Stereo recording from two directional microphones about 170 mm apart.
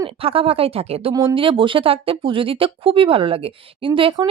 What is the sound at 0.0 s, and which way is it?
Speech, 35° right (ahead or behind).